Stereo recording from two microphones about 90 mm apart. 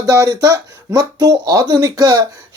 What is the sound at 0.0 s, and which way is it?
Speech, 40° right (ahead or behind).